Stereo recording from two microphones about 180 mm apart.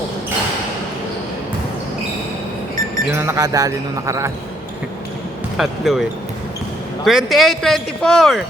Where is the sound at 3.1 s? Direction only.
15° right (ahead or behind).